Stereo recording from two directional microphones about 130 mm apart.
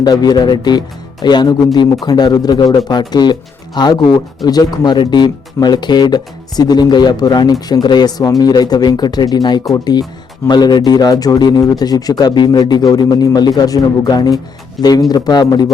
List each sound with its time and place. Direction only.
0.0 s speech: 30° left (ahead or behind)